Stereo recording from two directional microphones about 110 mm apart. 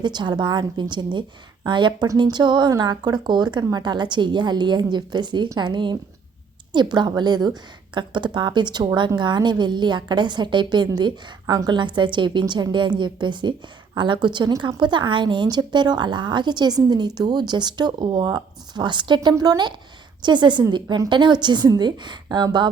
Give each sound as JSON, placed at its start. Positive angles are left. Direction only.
{"t": 0.0, "sound": "a woman's voice", "side_deg": -40}